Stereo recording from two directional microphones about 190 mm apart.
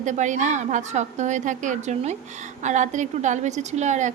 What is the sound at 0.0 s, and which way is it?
A woman's voice, 40° right (ahead or behind).